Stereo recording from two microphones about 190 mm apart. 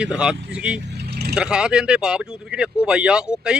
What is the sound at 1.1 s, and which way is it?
Vehicle, 55° right (ahead or behind).